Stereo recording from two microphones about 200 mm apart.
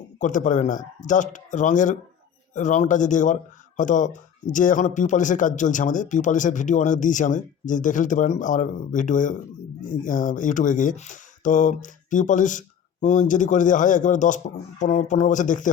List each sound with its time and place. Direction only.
0.2 s speech: 40° left (ahead or behind)